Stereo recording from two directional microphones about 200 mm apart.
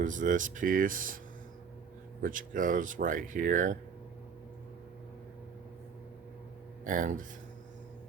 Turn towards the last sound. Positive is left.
turn(degrees=-40)  # may be behind; listen again after turning